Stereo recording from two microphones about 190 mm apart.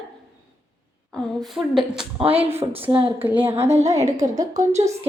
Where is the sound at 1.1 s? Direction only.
Centre (ahead or behind).